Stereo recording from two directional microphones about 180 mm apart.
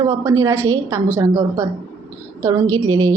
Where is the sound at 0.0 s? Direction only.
20° right (ahead or behind).